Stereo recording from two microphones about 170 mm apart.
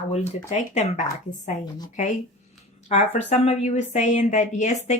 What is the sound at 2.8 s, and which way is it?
A woman's voice, 40° left (ahead or behind).